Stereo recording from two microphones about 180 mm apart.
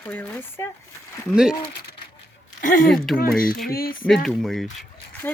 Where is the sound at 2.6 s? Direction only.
50° left (ahead or behind).